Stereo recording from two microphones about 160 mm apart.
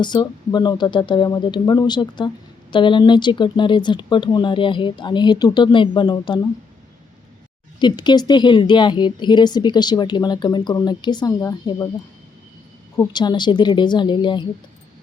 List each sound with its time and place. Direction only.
0.0 s a woman's voice: 25° left (ahead or behind)
7.8 s a woman's voice: 30° left (ahead or behind)
13.1 s a woman's voice: 25° left (ahead or behind)